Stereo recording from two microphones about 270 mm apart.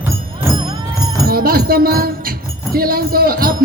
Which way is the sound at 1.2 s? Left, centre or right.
Right.